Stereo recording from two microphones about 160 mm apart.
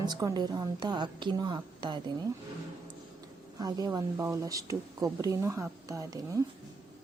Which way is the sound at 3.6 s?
25° right (ahead or behind).